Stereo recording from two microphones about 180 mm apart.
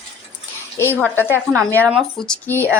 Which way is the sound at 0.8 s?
10° left (ahead or behind).